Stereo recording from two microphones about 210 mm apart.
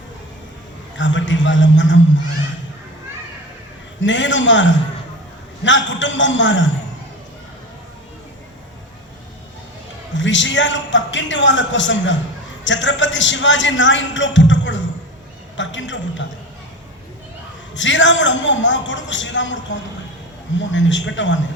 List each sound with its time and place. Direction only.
0.9 s a man's voice: 60° left (ahead or behind)
4.0 s a man's voice: 60° left (ahead or behind)
10.2 s a man's voice: 60° left (ahead or behind)
17.7 s a man's voice: 60° left (ahead or behind)